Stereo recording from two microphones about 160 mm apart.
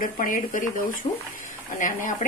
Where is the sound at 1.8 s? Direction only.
55° left (ahead or behind).